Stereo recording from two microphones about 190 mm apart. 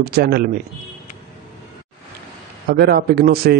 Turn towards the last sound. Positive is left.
turn(degrees=-55)  # may be behind; listen again after turning